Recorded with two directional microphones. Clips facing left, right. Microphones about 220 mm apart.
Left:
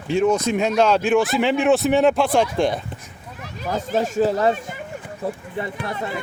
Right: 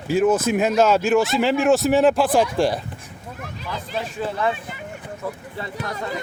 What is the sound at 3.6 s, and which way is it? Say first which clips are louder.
Speech: left 8 dB; 45° left (ahead or behind).